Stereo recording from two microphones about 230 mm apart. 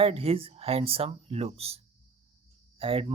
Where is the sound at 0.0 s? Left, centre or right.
Right.